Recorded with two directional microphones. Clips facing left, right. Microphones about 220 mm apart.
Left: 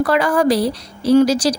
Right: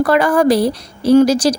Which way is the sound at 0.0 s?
50° right (ahead or behind).